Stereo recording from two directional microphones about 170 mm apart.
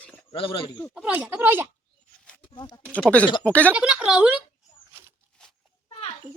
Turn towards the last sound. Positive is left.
turn(degrees=-5)  # may be behind; listen again after turning